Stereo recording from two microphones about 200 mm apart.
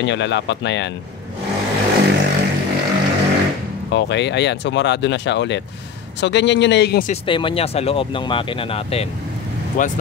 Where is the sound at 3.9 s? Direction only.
60° left (ahead or behind).